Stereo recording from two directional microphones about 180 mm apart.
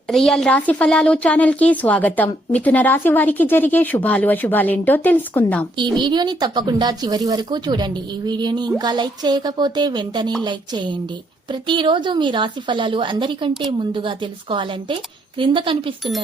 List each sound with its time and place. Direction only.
0.1 s a woman's voice: centre (ahead or behind)
5.7 s a woman's voice: 25° right (ahead or behind)